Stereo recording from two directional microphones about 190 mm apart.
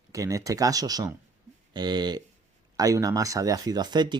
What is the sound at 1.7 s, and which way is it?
Speech, 20° right (ahead or behind).